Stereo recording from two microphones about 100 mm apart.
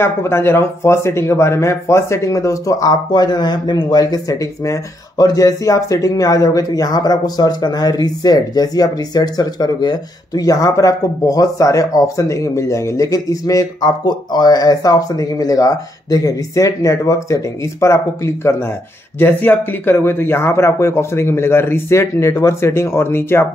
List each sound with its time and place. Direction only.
0.0 s speech: 25° left (ahead or behind)